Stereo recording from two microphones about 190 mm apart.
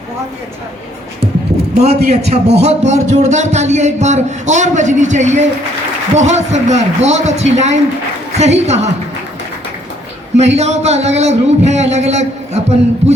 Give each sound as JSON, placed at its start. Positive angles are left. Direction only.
{"t": 2.0, "sound": "speech", "side_deg": -35}
{"t": 10.3, "sound": "speech", "side_deg": -35}